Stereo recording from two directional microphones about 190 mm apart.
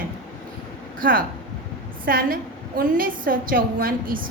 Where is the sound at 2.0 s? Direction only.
50° right (ahead or behind).